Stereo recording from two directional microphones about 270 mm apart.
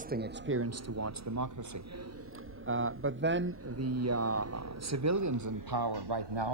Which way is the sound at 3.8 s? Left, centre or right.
Right.